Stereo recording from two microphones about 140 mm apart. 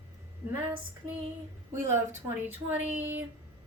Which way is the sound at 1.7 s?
15° right (ahead or behind).